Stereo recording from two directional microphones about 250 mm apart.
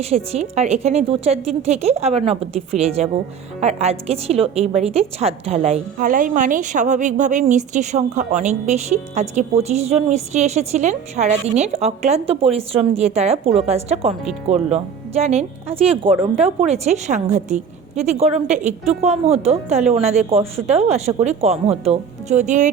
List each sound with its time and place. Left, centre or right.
0.0 s a woman's voice: right